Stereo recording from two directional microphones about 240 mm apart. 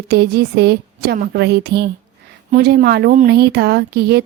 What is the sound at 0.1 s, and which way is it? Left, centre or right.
Speech, right.